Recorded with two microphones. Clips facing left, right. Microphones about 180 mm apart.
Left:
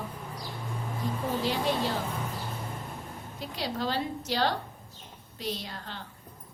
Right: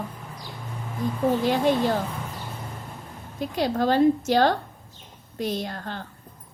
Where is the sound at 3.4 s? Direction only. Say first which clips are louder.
Right 9 dB; 50° right (ahead or behind).